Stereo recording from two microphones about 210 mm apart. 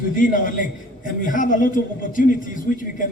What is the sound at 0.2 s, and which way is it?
A man's voice, 40° left (ahead or behind).